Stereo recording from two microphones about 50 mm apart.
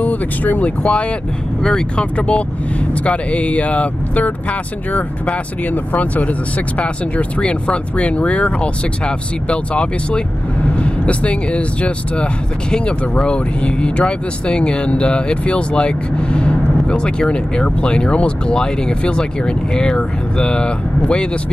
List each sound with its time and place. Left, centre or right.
0.0 s speech: left
1.6 s speech: centre